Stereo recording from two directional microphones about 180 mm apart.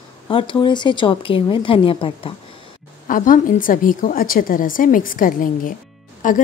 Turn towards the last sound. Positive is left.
turn(degrees=45)  # may be behind; listen again after turning